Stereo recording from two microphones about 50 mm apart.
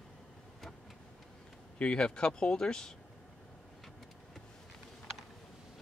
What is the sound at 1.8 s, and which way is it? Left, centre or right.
Speech, centre.